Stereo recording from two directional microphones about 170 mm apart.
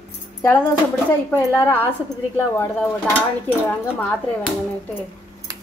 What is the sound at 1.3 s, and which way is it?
A woman's voice, 10° left (ahead or behind).